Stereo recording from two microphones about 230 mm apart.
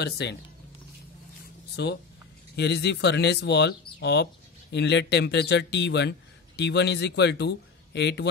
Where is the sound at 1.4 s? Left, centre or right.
Left.